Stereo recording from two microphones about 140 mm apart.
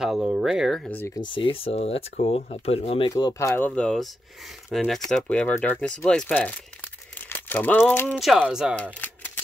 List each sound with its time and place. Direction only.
0.0 s speech: 5° right (ahead or behind)
0.8 s speech: 15° left (ahead or behind)
1.2 s speech: 35° left (ahead or behind)
3.1 s speech: 25° left (ahead or behind)
8.2 s speech: centre (ahead or behind)
8.7 s a sound: 10° left (ahead or behind)